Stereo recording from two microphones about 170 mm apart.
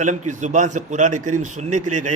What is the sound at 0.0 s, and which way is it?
A man's voice, 45° right (ahead or behind).